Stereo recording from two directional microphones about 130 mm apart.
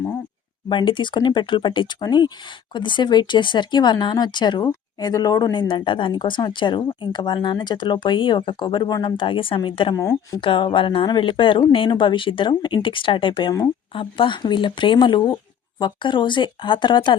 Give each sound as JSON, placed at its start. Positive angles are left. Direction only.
{"t": 0.7, "sound": "speech", "side_deg": 40}
{"t": 9.9, "sound": "a woman's voice", "side_deg": 25}
{"t": 10.4, "sound": "speech", "side_deg": 40}